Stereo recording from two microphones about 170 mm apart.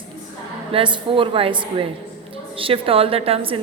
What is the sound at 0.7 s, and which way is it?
A woman's voice, 30° right (ahead or behind).